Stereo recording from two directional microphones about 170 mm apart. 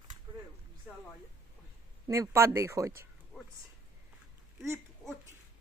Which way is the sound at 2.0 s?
20° right (ahead or behind).